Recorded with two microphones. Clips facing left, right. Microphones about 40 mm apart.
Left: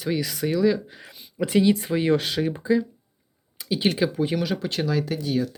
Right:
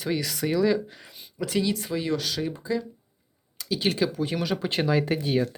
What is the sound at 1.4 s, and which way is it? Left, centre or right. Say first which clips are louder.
Speech: left 6 dB; left.